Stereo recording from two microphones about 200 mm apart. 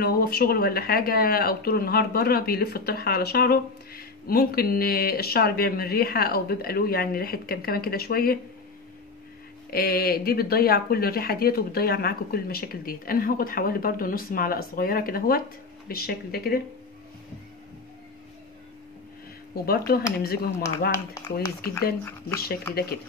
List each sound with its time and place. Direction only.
0.0 s speech: 50° left (ahead or behind)
9.7 s speech: 50° left (ahead or behind)
19.5 s speech: 50° left (ahead or behind)
22.4 s speech: 50° left (ahead or behind)